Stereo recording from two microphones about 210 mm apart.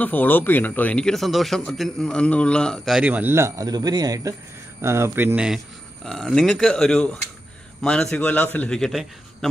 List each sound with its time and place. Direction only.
0.0 s speech: 10° left (ahead or behind)